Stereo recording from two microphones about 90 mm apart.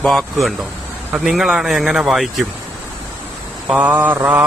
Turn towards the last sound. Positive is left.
turn(degrees=-20)  # may be behind; listen again after turning